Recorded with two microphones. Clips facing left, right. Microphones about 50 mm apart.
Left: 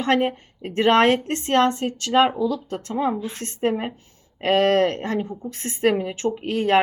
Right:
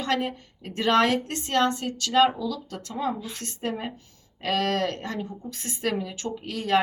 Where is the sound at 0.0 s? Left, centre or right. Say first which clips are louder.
Left 6 dB; left.